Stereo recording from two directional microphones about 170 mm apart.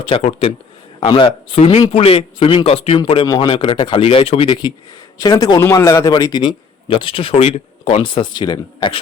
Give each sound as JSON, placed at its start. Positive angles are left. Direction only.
{"t": 0.0, "sound": "speech", "side_deg": 35}